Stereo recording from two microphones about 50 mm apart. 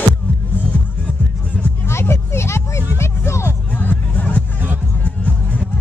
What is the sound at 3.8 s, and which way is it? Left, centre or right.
Music, left.